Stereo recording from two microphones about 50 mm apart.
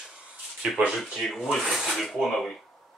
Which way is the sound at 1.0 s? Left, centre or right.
Centre.